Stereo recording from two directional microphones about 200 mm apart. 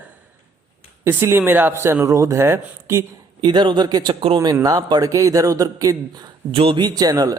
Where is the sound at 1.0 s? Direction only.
10° right (ahead or behind).